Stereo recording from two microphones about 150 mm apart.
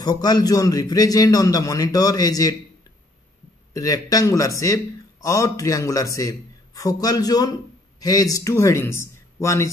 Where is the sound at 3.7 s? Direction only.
25° left (ahead or behind).